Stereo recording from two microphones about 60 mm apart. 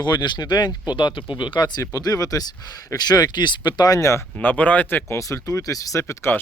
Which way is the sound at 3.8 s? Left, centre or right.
Left.